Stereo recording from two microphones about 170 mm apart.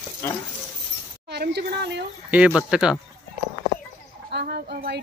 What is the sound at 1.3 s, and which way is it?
Speech, 80° right.